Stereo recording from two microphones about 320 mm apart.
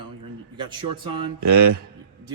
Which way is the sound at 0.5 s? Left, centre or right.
Centre.